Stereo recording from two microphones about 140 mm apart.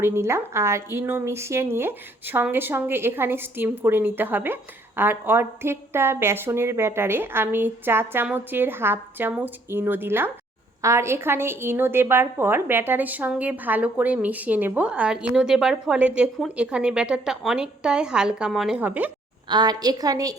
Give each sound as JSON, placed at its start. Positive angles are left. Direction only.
{"t": 0.0, "sound": "a woman's voice", "side_deg": -20}
{"t": 19.5, "sound": "a woman's voice", "side_deg": -30}